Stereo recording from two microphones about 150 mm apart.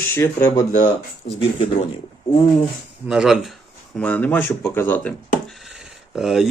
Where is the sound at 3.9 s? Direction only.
10° left (ahead or behind).